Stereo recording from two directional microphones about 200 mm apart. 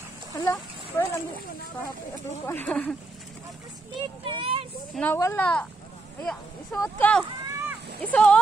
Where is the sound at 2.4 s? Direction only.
10° left (ahead or behind).